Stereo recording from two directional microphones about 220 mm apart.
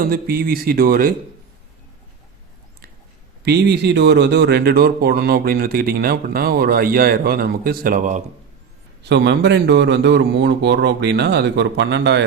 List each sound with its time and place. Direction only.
0.1 s speech: 40° right (ahead or behind)
3.4 s speech: 50° right (ahead or behind)
9.0 s speech: 50° right (ahead or behind)